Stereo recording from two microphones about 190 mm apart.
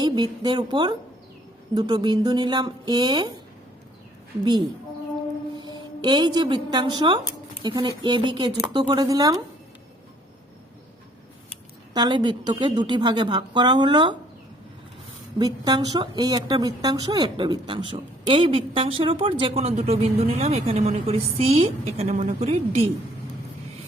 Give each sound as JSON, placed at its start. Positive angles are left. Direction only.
{"t": 0.0, "sound": "a woman's voice", "side_deg": -25}
{"t": 5.5, "sound": "a woman's voice", "side_deg": -25}
{"t": 11.9, "sound": "a woman's voice", "side_deg": -25}
{"t": 15.4, "sound": "a woman's voice", "side_deg": -20}